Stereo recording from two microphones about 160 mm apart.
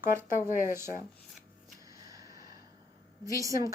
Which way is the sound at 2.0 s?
20° right (ahead or behind).